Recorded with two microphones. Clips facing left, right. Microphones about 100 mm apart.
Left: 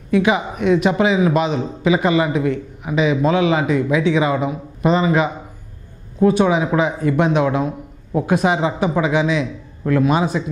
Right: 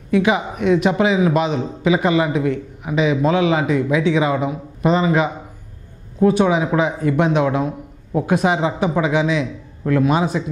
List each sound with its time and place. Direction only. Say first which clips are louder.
0.1 s a man's voice: even; 15° left (ahead or behind)